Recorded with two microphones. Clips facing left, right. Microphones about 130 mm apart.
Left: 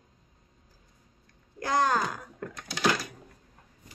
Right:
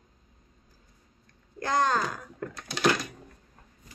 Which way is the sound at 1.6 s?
10° left (ahead or behind).